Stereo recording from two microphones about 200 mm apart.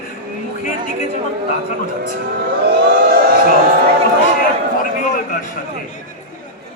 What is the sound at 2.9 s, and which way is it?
Speech, 50° right (ahead or behind).